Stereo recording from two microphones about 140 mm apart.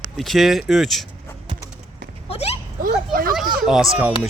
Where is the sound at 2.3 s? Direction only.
45° left (ahead or behind).